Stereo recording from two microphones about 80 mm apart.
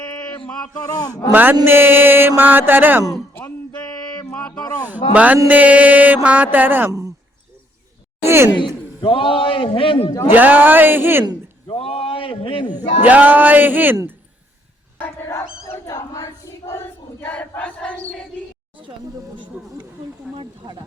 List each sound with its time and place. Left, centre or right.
0.3 s speech: centre
0.8 s speech: left
1.3 s music: right
4.9 s music: centre
8.2 s speech: right
8.5 s a man's voice: left
10.3 s music: right
12.2 s a man's voice: left
12.7 s music: right
14.9 s speech: left
15.9 s a sound: left
17.2 s battle cry: centre
20.4 s a sound: right